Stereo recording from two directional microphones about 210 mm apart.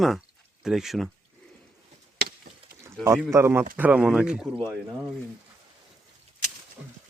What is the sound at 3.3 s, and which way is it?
Speech, 10° right (ahead or behind).